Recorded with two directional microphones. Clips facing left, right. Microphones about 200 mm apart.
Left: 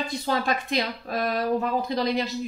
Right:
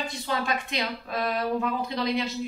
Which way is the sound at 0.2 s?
40° left (ahead or behind).